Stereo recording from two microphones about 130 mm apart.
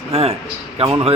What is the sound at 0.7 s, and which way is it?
Speech, 45° right (ahead or behind).